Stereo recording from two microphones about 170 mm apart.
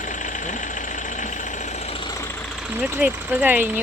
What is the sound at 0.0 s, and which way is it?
Vehicle, 50° left (ahead or behind).